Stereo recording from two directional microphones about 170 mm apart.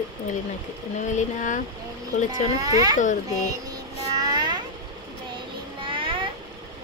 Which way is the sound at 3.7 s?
25° right (ahead or behind).